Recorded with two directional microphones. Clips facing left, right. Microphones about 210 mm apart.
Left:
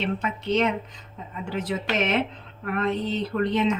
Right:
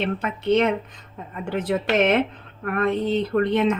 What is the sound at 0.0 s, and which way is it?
Speech, 55° right (ahead or behind).